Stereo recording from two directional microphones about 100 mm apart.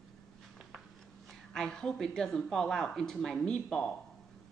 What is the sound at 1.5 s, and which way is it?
A woman's voice, 5° left (ahead or behind).